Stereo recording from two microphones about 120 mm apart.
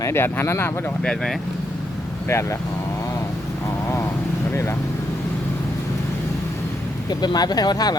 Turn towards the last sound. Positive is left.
turn(degrees=35)  # may be behind; listen again after turning